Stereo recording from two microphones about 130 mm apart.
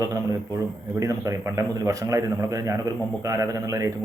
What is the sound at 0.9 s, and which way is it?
Speech, 25° right (ahead or behind).